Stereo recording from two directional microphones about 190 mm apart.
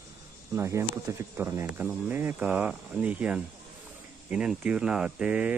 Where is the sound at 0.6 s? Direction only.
15° right (ahead or behind).